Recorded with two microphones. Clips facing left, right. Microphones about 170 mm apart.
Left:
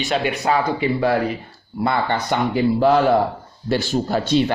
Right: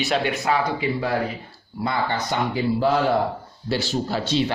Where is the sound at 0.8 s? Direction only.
65° left (ahead or behind).